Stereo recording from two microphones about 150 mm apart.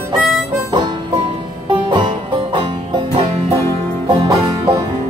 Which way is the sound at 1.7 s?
30° right (ahead or behind).